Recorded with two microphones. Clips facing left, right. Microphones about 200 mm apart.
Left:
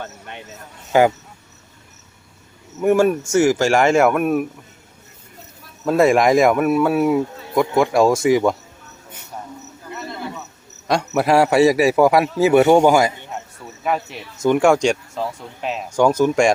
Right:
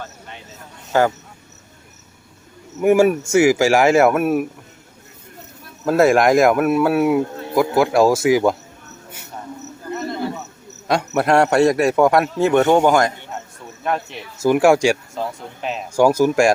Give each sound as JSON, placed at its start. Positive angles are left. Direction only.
{"t": 0.9, "sound": "speech", "side_deg": 15}
{"t": 2.8, "sound": "speech", "side_deg": -10}
{"t": 5.8, "sound": "speech", "side_deg": 0}
{"t": 10.8, "sound": "speech", "side_deg": 0}